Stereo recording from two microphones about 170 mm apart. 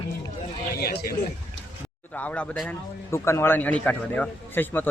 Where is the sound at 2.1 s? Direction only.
10° left (ahead or behind).